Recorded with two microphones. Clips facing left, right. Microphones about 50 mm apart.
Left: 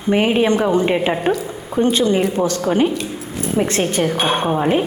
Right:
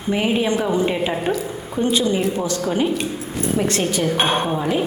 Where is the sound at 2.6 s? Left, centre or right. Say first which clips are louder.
Left 3 dB; left.